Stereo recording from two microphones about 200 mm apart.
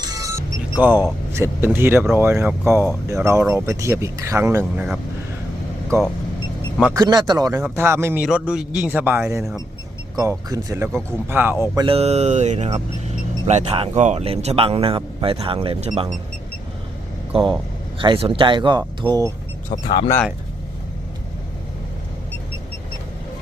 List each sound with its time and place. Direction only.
0.0 s music: 15° right (ahead or behind)
1.3 s speech: 10° right (ahead or behind)
6.9 s speech: 20° right (ahead or behind); by 9.6 s 5° right (ahead or behind)
10.2 s speech: 15° right (ahead or behind)
17.3 s speech: 30° right (ahead or behind)
19.9 s speech: 20° left (ahead or behind)